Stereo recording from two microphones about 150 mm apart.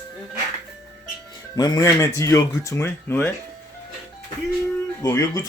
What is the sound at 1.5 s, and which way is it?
Speech, 25° left (ahead or behind).